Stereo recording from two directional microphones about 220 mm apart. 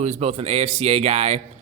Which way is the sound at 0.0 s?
30° right (ahead or behind).